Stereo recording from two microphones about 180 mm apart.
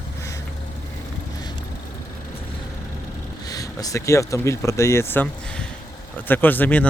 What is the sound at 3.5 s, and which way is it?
Speech, 20° left (ahead or behind).